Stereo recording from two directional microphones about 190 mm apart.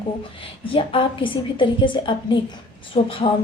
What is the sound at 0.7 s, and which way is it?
A woman's voice, 30° left (ahead or behind).